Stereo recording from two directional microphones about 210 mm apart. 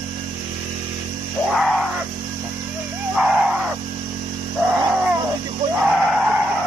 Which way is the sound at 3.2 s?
5° right (ahead or behind).